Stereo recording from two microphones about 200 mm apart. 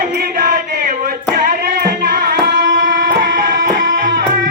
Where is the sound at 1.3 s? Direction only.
45° right (ahead or behind); by 3.3 s 65° right (ahead or behind).